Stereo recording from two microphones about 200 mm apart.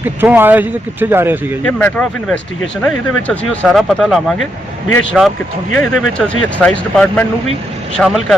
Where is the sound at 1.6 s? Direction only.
5° left (ahead or behind).